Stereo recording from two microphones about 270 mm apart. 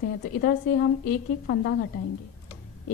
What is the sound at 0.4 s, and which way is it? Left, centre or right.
A woman's voice, left.